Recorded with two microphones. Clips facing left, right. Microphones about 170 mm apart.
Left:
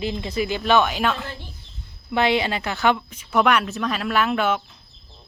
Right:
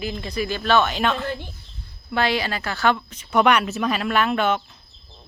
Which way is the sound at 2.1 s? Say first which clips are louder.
Left 2 dB; 20° left (ahead or behind).